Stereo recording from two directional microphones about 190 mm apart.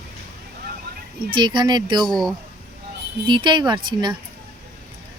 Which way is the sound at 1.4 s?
25° right (ahead or behind).